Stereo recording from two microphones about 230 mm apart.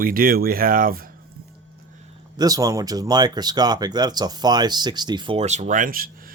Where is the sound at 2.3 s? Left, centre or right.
Centre.